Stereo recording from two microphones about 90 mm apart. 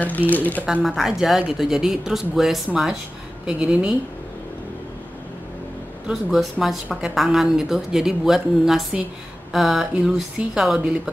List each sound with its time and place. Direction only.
0.3 s speech: 20° left (ahead or behind)
0.8 s a woman's voice: 5° right (ahead or behind)
6.0 s a woman's voice: centre (ahead or behind)